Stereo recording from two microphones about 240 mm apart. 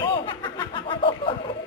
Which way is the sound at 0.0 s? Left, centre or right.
Centre.